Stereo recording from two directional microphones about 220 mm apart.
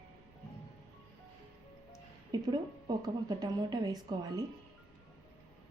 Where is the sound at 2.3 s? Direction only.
20° right (ahead or behind).